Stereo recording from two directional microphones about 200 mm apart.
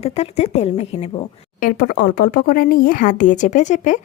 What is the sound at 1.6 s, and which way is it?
A woman's voice, 45° left (ahead or behind).